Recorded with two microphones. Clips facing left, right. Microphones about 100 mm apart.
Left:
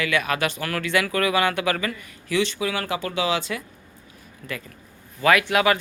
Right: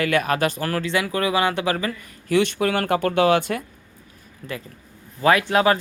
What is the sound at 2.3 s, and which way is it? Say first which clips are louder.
Speech: right 4 dB; 55° right (ahead or behind).